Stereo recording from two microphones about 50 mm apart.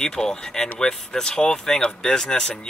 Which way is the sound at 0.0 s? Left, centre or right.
Centre.